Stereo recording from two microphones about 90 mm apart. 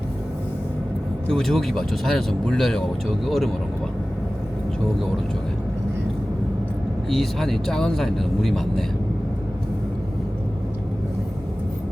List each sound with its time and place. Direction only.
1.3 s speech: 5° left (ahead or behind)
7.1 s speech: centre (ahead or behind)